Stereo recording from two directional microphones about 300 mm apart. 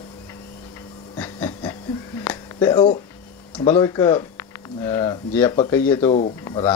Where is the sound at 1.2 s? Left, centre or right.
Centre.